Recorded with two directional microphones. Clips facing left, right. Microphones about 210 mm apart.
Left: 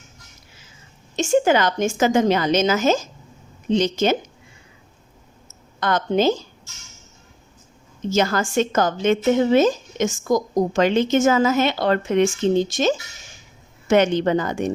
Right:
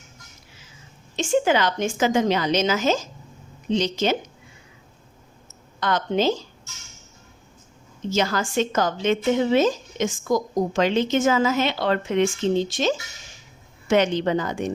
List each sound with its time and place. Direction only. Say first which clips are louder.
1.1 s speech: left 3 dB; 45° left (ahead or behind)
5.8 s speech: left 3 dB; 50° left (ahead or behind)
8.1 s speech: left 3 dB; 45° left (ahead or behind)